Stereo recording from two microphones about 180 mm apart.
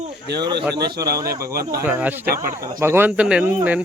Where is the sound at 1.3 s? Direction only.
55° right (ahead or behind).